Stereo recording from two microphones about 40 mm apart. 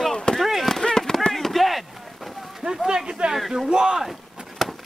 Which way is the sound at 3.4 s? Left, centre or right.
Centre.